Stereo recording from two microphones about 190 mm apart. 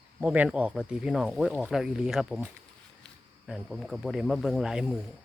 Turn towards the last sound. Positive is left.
turn(degrees=-5)  # may be behind; listen again after turning